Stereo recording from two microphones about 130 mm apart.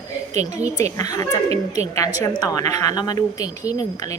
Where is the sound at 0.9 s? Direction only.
30° left (ahead or behind).